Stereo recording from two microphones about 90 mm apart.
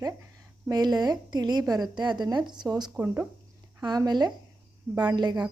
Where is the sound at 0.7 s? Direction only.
45° right (ahead or behind).